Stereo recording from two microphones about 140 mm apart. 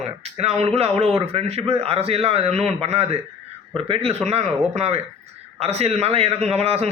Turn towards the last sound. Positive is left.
turn(degrees=-45)  # may be behind; listen again after turning